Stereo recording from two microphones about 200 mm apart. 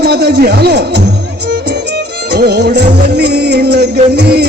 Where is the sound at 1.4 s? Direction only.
55° right (ahead or behind).